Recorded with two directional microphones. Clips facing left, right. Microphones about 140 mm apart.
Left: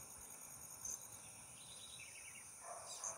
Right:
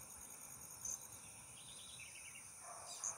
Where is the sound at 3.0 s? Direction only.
55° left (ahead or behind).